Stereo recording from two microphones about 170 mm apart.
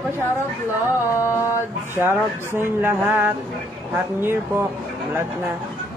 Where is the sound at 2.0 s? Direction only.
15° right (ahead or behind).